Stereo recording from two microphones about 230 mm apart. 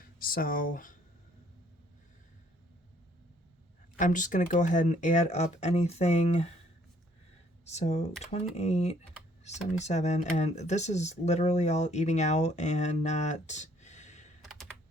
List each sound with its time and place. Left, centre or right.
0.2 s speech: left
3.9 s speech: left
7.6 s speech: left